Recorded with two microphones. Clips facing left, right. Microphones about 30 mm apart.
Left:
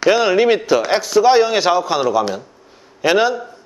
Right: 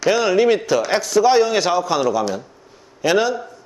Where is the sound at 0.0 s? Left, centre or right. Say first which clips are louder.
Left 2 dB; left.